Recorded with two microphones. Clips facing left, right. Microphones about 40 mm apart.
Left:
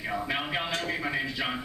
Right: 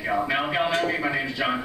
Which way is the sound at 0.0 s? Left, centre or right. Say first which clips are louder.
Right 7 dB; centre.